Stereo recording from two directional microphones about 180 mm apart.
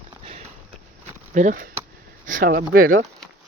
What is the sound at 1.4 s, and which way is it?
Speech, 45° right (ahead or behind).